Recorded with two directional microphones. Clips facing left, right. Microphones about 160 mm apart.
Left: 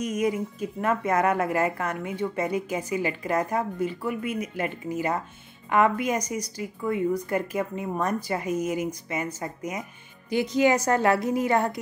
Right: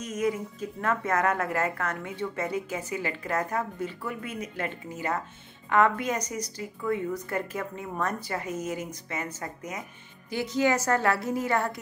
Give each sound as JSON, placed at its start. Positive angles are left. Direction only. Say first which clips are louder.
{"t": 0.0, "sound": "speech", "louder": "left 3 dB", "side_deg": 10}